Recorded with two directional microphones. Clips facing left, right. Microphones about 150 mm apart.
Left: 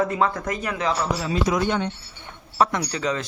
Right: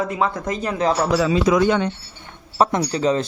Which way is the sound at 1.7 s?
90° right.